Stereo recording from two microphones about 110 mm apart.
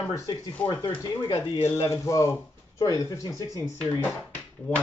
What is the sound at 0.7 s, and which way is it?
Speech, 45° left (ahead or behind).